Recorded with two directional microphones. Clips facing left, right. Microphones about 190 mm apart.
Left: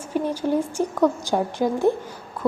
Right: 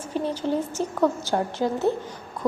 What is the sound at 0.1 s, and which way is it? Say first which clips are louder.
A woman's voice: left 3 dB; 10° left (ahead or behind).